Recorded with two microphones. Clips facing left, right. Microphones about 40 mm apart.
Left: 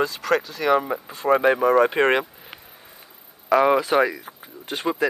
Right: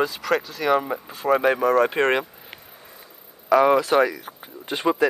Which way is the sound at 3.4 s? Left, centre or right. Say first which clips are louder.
Right 1 dB; centre.